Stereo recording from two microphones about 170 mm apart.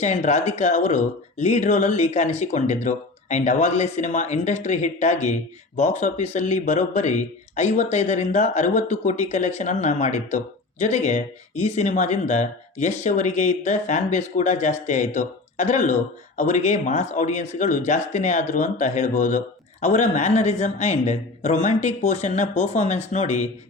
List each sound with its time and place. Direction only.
0.0 s speech: 45° left (ahead or behind)